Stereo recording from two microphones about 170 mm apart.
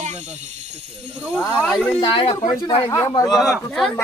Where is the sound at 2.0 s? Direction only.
30° left (ahead or behind).